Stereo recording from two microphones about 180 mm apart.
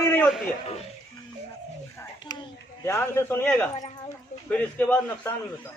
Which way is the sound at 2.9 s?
15° left (ahead or behind).